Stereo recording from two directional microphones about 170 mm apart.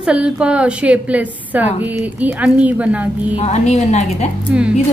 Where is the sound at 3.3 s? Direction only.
40° left (ahead or behind).